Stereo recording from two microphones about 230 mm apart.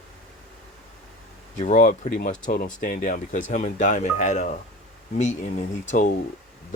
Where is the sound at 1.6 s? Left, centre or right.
Left.